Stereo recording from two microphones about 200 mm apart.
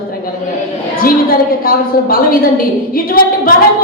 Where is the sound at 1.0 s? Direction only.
45° left (ahead or behind).